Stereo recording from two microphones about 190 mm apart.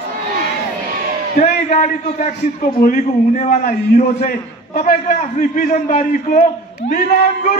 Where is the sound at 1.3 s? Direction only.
40° left (ahead or behind).